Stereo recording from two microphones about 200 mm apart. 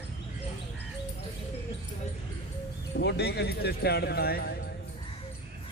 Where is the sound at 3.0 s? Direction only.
60° left (ahead or behind).